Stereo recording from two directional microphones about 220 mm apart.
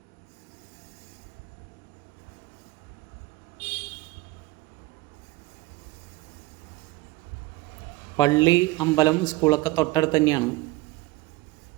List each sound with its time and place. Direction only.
8.1 s a man's voice: 20° left (ahead or behind)